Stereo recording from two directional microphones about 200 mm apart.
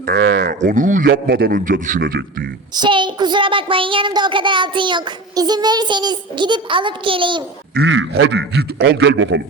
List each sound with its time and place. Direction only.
0.3 s a man's voice: 50° right (ahead or behind)
0.6 s a man's voice: 40° right (ahead or behind)
2.7 s a child's voice: 20° right (ahead or behind)
7.7 s a man's voice: 60° right (ahead or behind)